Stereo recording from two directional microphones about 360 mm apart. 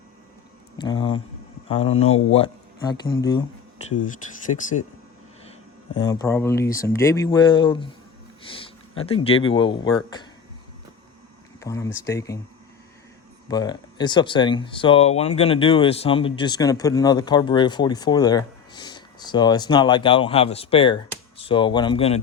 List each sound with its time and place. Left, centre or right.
0.8 s speech: centre
3.8 s speech: left
8.5 s a sound: centre
9.4 s speech: centre
11.6 s speech: centre
13.5 s speech: centre